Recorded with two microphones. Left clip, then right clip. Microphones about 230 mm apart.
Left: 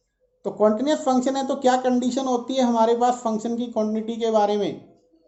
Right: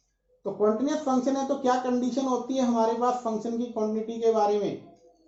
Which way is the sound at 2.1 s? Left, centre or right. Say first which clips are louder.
Left 4 dB; left.